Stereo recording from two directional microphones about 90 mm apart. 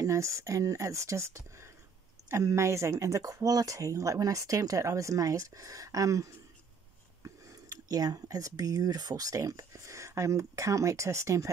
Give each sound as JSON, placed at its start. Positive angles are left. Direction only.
{"t": 0.0, "sound": "speech", "side_deg": -35}